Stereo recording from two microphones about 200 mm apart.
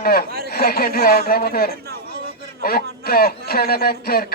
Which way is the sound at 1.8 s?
50° right (ahead or behind).